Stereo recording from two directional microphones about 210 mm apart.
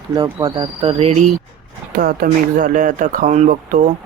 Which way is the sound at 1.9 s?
45° right (ahead or behind).